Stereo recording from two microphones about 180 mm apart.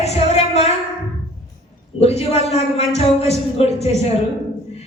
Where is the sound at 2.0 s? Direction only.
35° left (ahead or behind).